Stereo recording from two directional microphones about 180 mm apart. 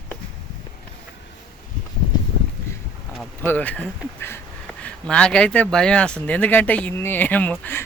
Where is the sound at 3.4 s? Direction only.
10° left (ahead or behind).